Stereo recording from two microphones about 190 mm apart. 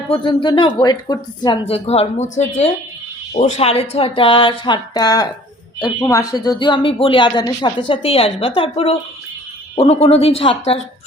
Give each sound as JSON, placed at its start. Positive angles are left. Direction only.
{"t": 0.1, "sound": "a woman's voice", "side_deg": 25}